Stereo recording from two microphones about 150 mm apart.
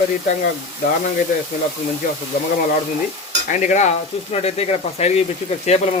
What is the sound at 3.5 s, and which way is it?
Speech, 55° left (ahead or behind).